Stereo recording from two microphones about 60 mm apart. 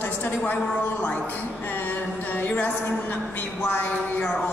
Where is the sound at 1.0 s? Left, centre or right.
Left.